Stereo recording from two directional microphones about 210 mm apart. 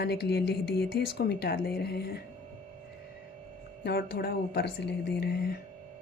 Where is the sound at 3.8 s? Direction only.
50° left (ahead or behind).